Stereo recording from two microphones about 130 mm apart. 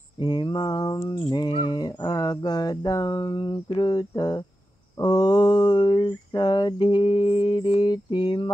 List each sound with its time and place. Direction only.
0.2 s mantra: 35° left (ahead or behind)